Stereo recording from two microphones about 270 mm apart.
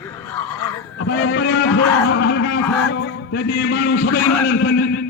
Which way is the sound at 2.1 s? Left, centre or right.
Left.